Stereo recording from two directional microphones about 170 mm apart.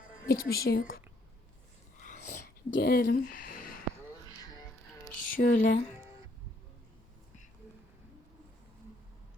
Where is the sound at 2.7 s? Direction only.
65° left (ahead or behind).